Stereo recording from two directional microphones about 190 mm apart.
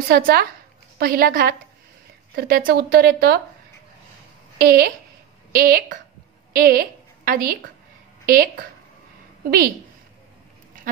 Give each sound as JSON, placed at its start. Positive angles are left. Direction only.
{"t": 0.1, "sound": "speech", "side_deg": -55}
{"t": 4.6, "sound": "a woman's voice", "side_deg": -50}